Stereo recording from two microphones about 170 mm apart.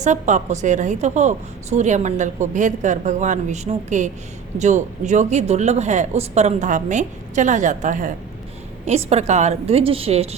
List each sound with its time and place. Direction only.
0.0 s a woman's voice: 45° right (ahead or behind)
8.9 s a woman's voice: 40° right (ahead or behind)